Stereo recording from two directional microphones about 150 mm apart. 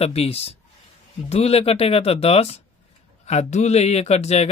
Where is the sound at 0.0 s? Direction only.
40° left (ahead or behind).